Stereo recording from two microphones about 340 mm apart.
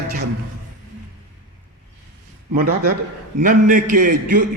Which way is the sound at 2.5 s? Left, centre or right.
Right.